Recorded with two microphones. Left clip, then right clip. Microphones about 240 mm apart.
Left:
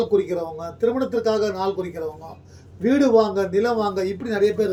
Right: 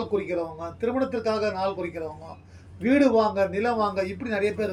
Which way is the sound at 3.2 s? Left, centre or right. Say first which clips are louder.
Left 3 dB; centre.